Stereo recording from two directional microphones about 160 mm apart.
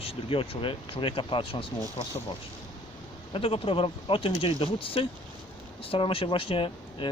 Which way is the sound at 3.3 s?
35° left (ahead or behind).